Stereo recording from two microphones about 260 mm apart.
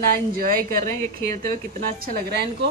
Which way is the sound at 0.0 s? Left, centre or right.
Right.